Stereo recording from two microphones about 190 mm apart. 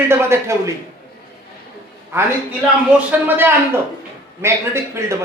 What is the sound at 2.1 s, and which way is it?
Speech, 15° right (ahead or behind).